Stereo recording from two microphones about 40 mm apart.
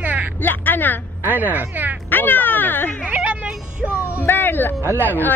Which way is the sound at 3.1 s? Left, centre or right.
Right.